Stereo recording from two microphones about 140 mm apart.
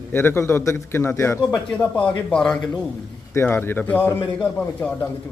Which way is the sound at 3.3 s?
15° left (ahead or behind).